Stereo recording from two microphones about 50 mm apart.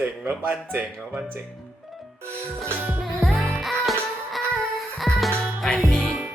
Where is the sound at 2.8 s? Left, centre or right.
Right.